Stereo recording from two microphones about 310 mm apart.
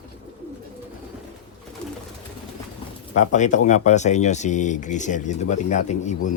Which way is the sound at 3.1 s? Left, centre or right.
Left.